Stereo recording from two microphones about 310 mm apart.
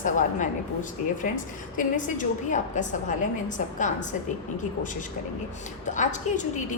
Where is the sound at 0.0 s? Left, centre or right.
Left.